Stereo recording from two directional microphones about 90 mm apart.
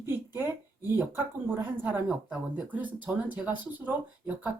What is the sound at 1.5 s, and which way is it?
Speech, 20° right (ahead or behind).